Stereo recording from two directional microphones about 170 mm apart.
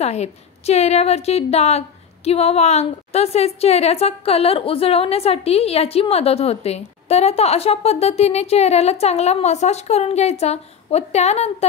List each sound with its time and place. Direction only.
0.0 s a woman's voice: 40° left (ahead or behind)